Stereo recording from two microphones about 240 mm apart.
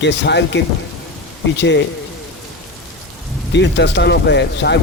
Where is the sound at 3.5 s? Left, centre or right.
Left.